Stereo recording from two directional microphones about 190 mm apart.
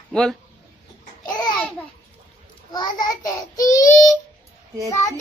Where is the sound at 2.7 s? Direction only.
20° left (ahead or behind).